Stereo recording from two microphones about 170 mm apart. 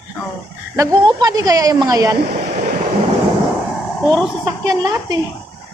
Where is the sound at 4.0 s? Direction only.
5° left (ahead or behind).